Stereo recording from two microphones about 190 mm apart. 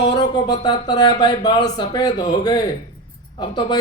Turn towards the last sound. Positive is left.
turn(degrees=25)  # may be behind; listen again after turning